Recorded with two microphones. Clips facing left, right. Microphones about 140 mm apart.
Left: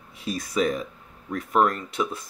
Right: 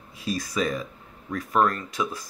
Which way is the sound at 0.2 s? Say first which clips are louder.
Left 2 dB; 25° left (ahead or behind).